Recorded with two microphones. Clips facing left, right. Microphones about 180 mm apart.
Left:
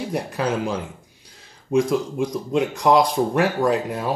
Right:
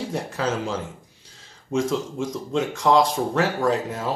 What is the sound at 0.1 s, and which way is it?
Speech, 15° left (ahead or behind).